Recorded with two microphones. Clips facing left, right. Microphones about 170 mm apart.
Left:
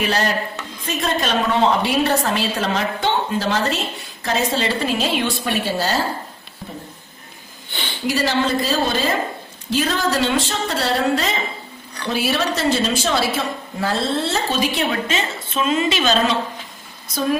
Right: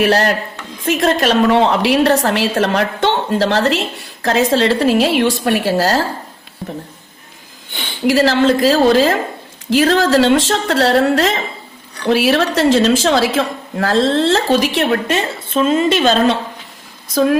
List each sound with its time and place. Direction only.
0.0 s speech: 70° right (ahead or behind)
0.9 s a woman's voice: 90° right
8.0 s a woman's voice: 90° right; by 15.2 s 65° right (ahead or behind)
15.6 s a woman's voice: 50° right (ahead or behind)